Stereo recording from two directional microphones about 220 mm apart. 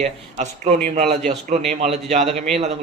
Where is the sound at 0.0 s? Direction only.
30° right (ahead or behind).